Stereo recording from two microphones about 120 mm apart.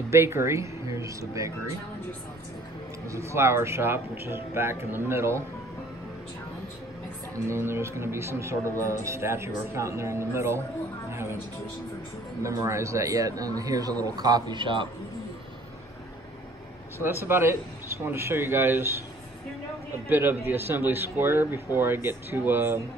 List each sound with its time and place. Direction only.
0.1 s speech: 20° right (ahead or behind)
3.1 s speech: 25° right (ahead or behind)
7.3 s speech: 20° right (ahead or behind)
11.1 s music: 20° right (ahead or behind)
12.4 s speech: 25° right (ahead or behind); by 14.9 s 45° right (ahead or behind)
17.0 s speech: 20° right (ahead or behind)
20.1 s speech: 20° right (ahead or behind)